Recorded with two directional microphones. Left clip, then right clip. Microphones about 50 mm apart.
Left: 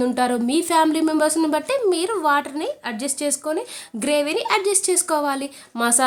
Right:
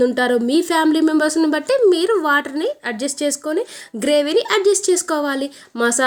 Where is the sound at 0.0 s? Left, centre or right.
Centre.